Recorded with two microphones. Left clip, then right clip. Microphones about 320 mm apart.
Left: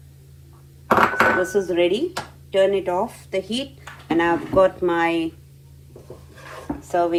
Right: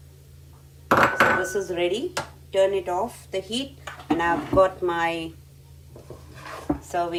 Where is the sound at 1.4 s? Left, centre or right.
Centre.